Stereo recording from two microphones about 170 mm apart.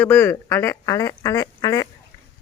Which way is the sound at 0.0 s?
10° left (ahead or behind).